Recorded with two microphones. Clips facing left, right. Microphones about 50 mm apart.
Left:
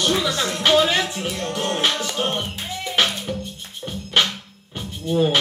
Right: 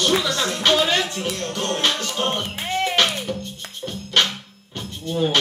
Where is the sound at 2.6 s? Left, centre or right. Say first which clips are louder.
Right 7 dB; right.